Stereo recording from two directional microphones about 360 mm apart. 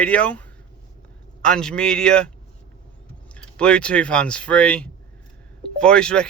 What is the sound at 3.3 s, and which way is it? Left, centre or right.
Speech, centre.